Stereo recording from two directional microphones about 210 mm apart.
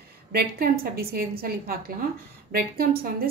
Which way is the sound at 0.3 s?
45° right (ahead or behind).